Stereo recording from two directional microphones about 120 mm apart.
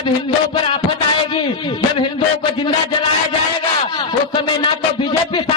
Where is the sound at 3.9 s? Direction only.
40° left (ahead or behind).